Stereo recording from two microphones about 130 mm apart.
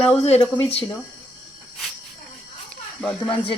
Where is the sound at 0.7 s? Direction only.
45° left (ahead or behind).